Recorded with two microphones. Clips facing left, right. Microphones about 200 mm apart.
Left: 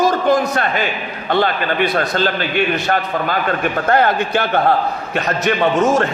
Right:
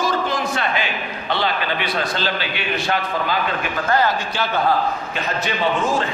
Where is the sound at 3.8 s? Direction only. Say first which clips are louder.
Left 4 dB; 60° left (ahead or behind).